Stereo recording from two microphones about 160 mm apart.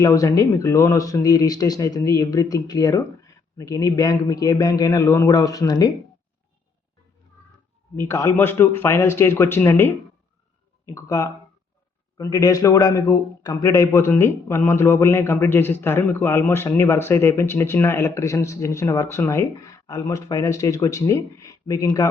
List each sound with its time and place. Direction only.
0.0 s speech: 20° left (ahead or behind)
7.9 s a man's voice: 15° left (ahead or behind)